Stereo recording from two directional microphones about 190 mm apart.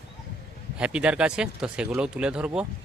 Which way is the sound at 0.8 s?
5° right (ahead or behind).